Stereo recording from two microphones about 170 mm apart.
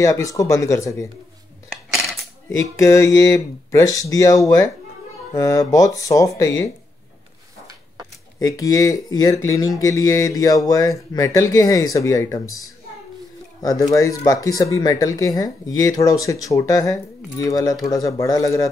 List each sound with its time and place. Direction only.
0.0 s speech: 20° left (ahead or behind)
2.6 s speech: 15° left (ahead or behind)
8.4 s speech: 20° left (ahead or behind)